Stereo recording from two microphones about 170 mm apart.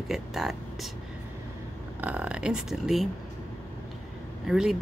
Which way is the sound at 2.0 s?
10° right (ahead or behind).